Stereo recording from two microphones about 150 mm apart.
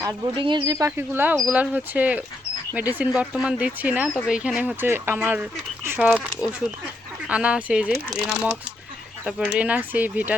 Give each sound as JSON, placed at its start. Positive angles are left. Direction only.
{"t": 0.0, "sound": "speech", "side_deg": -30}
{"t": 0.9, "sound": "speech", "side_deg": -15}
{"t": 7.3, "sound": "speech", "side_deg": -10}